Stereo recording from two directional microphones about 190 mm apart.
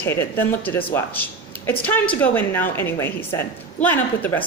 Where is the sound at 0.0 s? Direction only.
10° left (ahead or behind).